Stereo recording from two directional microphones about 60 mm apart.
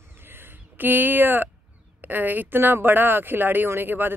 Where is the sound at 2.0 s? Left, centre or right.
Right.